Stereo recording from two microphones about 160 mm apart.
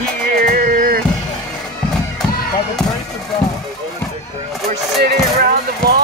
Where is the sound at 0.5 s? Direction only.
65° right (ahead or behind).